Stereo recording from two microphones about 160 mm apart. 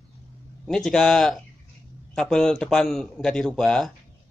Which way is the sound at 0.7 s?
5° left (ahead or behind).